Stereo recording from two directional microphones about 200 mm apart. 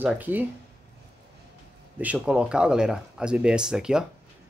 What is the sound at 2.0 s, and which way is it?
Speech, 5° right (ahead or behind).